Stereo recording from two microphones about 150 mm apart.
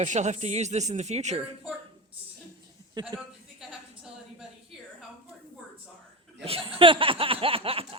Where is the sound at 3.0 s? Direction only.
30° right (ahead or behind).